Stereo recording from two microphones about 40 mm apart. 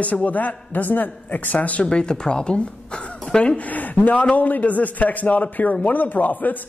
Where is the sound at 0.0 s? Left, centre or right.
Left.